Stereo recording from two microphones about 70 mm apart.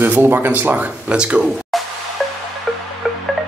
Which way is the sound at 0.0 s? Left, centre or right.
Right.